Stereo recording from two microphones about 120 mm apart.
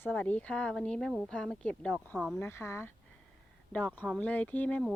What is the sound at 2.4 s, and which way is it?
Speech, 20° left (ahead or behind).